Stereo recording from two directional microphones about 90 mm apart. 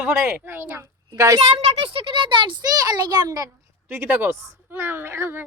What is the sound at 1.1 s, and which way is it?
Speech, 35° right (ahead or behind).